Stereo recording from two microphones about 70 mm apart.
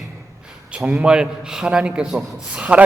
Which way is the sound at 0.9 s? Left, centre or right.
Centre.